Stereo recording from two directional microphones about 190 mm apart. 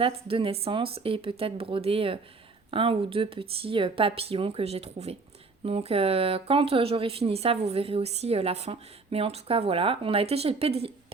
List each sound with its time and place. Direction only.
0.0 s speech: 30° right (ahead or behind)